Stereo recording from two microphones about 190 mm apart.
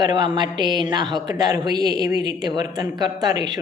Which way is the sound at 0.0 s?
25° right (ahead or behind).